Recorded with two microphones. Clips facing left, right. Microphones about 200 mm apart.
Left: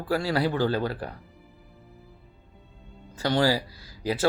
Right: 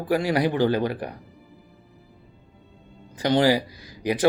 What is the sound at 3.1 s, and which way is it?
Speech, 20° right (ahead or behind).